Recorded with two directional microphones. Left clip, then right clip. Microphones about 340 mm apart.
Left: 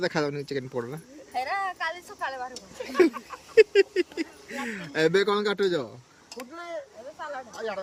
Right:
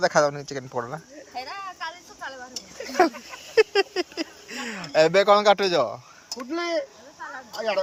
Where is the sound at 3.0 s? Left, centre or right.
Centre.